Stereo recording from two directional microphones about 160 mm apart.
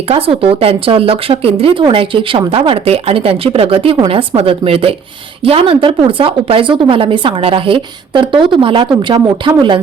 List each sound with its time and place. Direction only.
0.1 s speech: 35° right (ahead or behind)